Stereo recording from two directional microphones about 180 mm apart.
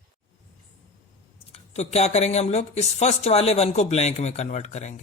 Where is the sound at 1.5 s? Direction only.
35° left (ahead or behind).